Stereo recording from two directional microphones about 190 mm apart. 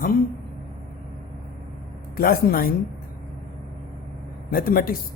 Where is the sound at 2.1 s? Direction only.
50° left (ahead or behind).